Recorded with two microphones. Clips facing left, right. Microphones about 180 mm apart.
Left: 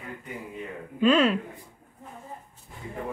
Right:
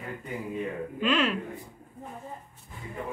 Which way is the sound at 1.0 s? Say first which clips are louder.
Left 6 dB; 40° left (ahead or behind).